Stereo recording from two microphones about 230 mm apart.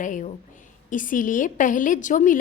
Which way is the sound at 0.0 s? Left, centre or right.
Left.